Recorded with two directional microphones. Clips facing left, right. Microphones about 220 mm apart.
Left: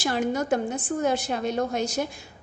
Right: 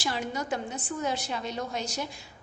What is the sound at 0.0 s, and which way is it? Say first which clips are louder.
A woman's voice: left 7 dB; 50° left (ahead or behind).